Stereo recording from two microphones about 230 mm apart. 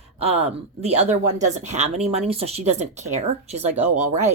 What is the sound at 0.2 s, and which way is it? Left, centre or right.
Speech, right.